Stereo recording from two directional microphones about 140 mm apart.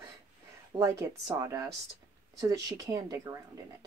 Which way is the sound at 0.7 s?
20° right (ahead or behind).